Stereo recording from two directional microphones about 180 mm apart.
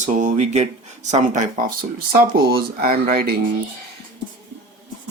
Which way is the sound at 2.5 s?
55° right (ahead or behind).